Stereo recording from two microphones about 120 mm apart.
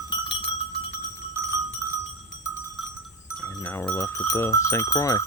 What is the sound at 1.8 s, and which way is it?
Cowbell, 15° right (ahead or behind).